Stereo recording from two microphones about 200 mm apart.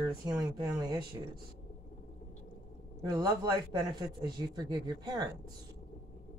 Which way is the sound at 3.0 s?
20° right (ahead or behind).